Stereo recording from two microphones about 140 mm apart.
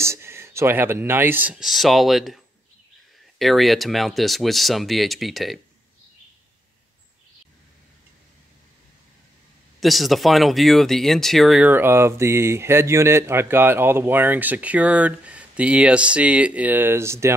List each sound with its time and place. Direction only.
0.0 s speech: 20° right (ahead or behind); by 5.6 s centre (ahead or behind)
9.8 s speech: centre (ahead or behind)
11.7 s speech: 15° right (ahead or behind)